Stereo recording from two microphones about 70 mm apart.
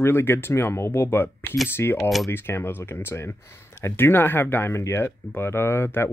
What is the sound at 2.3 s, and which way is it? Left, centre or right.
Speech, left.